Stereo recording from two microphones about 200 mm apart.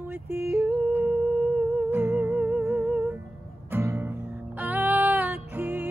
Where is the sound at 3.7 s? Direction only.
10° right (ahead or behind).